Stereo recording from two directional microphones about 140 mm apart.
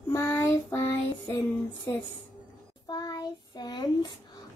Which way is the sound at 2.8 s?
30° left (ahead or behind).